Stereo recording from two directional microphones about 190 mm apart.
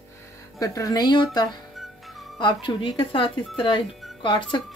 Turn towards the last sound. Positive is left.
turn(degrees=25)  # may be behind; listen again after turning